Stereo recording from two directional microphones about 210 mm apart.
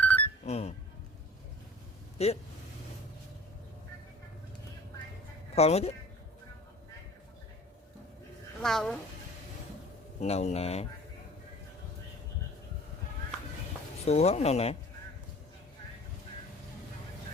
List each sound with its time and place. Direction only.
0.0 s a sound: 5° left (ahead or behind)
0.4 s speech: 30° left (ahead or behind)
2.1 s speech: 30° left (ahead or behind)
5.5 s speech: 30° left (ahead or behind)
8.6 s a woman's voice: centre (ahead or behind)
10.2 s speech: 30° left (ahead or behind)
14.0 s speech: 30° left (ahead or behind)